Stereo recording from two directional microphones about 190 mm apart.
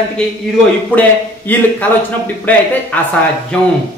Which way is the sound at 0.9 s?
10° left (ahead or behind).